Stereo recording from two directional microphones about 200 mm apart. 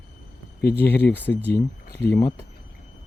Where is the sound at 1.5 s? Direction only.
50° left (ahead or behind).